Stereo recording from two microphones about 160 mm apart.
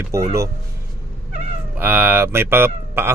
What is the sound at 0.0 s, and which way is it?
Speech, 20° right (ahead or behind).